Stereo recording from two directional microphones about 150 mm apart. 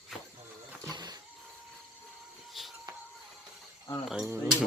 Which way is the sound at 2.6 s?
Centre (ahead or behind).